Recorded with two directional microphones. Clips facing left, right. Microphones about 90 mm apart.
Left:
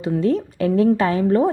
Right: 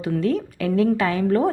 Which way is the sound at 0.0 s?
30° left (ahead or behind).